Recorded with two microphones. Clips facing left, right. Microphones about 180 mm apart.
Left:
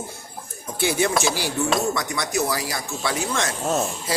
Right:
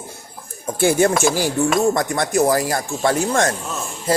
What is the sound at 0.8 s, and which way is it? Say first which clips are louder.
Speech: right 6 dB; 50° right (ahead or behind).